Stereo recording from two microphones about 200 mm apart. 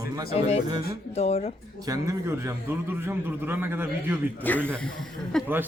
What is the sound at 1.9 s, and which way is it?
A man's voice, 15° right (ahead or behind).